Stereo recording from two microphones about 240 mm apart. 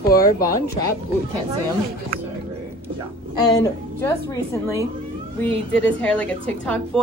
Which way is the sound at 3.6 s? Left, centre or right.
Centre.